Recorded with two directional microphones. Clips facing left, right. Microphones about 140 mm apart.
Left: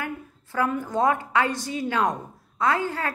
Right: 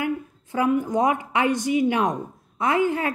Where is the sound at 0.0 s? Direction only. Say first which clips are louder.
Right 7 dB; 20° right (ahead or behind).